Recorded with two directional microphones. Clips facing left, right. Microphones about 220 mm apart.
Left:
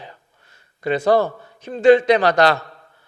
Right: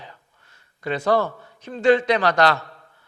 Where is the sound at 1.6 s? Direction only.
15° left (ahead or behind).